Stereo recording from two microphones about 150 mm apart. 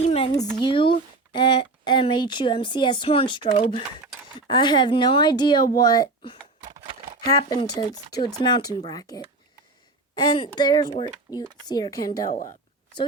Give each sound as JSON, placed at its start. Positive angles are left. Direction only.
{"t": 0.0, "sound": "a sound", "side_deg": 40}
{"t": 0.6, "sound": "speech", "side_deg": 35}
{"t": 6.6, "sound": "typewriter", "side_deg": -50}
{"t": 7.3, "sound": "speech", "side_deg": 25}
{"t": 12.3, "sound": "speech", "side_deg": 60}